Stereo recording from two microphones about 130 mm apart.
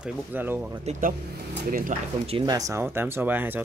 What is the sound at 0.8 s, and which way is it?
Speech, 80° right.